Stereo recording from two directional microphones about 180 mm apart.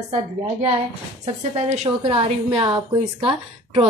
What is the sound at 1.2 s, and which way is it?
A woman's voice, 35° right (ahead or behind).